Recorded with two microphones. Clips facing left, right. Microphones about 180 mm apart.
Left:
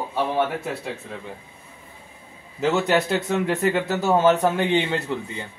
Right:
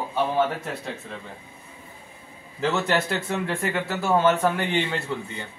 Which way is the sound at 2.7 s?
10° left (ahead or behind).